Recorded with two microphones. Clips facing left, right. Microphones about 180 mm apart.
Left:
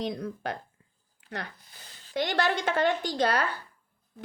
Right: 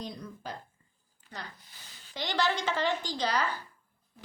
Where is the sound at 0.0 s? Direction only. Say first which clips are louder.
Left 8 dB; 75° left (ahead or behind).